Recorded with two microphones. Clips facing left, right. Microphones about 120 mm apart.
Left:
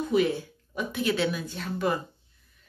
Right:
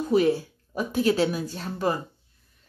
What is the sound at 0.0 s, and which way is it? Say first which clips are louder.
Speech: right 3 dB; 35° right (ahead or behind).